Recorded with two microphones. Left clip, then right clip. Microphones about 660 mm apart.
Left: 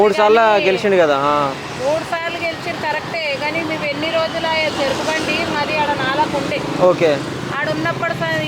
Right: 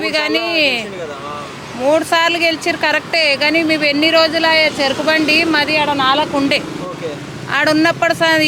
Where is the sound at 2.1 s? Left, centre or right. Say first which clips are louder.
Right 8 dB; right.